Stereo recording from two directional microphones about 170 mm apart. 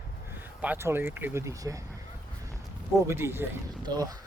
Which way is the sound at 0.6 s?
10° right (ahead or behind).